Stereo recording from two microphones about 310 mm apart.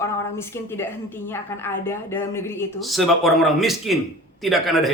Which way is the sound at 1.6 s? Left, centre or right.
Centre.